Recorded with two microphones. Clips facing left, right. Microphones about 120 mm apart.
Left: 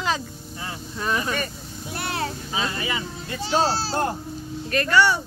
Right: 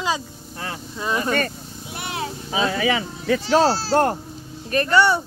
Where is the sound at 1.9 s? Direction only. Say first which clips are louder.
Left 1 dB; 10° right (ahead or behind).